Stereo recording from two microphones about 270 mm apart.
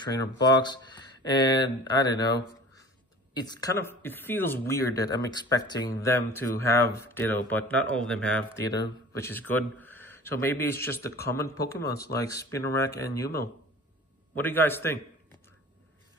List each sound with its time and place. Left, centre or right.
0.0 s speech: centre
3.3 s speech: centre